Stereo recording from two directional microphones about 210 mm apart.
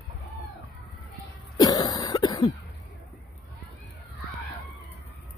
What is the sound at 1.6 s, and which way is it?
Cough, 20° left (ahead or behind).